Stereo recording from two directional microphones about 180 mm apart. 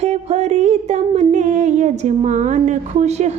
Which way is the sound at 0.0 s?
40° right (ahead or behind).